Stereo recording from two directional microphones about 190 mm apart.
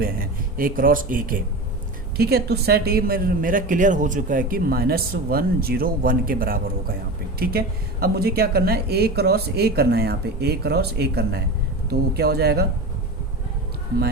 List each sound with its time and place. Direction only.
0.0 s speech: 50° right (ahead or behind)
2.1 s a woman's voice: 55° right (ahead or behind)